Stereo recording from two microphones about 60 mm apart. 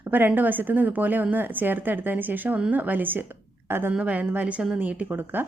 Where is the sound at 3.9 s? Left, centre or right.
Right.